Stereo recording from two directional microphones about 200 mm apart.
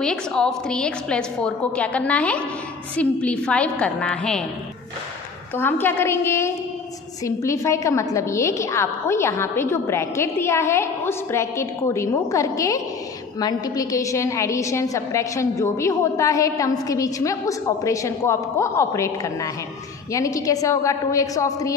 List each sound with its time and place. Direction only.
0.0 s a woman's voice: 5° left (ahead or behind)
5.6 s a woman's voice: 10° left (ahead or behind)